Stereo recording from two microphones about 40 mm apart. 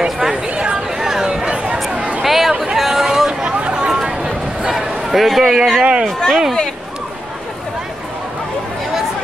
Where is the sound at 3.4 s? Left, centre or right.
Right.